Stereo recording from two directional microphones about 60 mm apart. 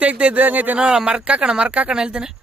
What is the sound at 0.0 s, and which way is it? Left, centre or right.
Speech, right.